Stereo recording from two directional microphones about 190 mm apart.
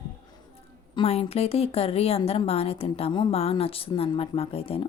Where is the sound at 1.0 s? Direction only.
30° left (ahead or behind).